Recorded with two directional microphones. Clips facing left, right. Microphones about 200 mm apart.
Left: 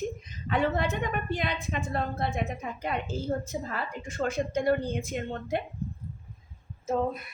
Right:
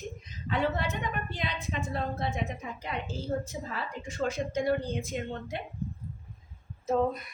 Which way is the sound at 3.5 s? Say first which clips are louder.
Left 3 dB; 50° left (ahead or behind).